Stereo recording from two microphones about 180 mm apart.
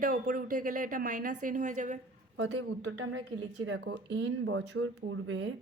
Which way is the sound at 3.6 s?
90° right.